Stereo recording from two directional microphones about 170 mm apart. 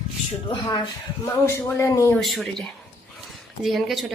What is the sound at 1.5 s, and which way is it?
Speech, 15° left (ahead or behind).